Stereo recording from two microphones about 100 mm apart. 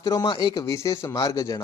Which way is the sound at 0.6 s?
30° left (ahead or behind).